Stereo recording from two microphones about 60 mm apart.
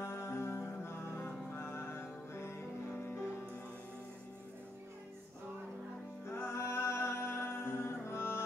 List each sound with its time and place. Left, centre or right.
0.0 s music: left
6.2 s music: left